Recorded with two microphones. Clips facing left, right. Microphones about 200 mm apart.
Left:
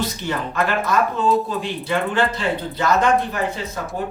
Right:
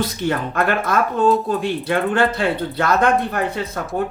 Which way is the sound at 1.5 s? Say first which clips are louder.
Right 4 dB; 55° right (ahead or behind).